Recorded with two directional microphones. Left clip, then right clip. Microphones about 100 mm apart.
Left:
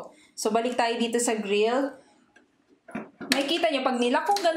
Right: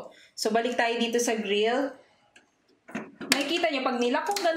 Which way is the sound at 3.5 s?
20° left (ahead or behind).